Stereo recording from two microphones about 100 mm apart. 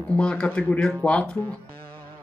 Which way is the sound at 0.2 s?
10° left (ahead or behind).